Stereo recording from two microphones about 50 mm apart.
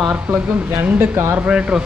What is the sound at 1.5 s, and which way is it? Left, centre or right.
Speech, centre.